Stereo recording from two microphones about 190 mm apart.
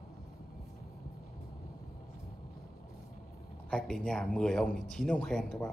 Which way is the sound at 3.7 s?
5° left (ahead or behind).